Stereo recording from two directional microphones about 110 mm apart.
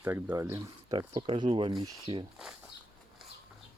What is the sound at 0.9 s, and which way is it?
Speech, 45° right (ahead or behind).